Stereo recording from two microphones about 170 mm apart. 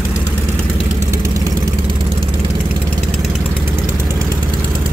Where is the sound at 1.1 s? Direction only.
20° right (ahead or behind).